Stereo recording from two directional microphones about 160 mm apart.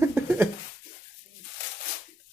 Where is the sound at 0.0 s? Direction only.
15° right (ahead or behind).